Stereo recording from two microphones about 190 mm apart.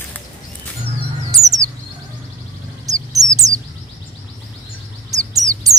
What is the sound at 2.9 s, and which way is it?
Bird, 20° right (ahead or behind).